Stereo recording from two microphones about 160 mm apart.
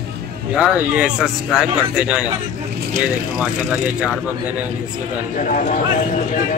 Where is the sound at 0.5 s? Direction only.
5° right (ahead or behind).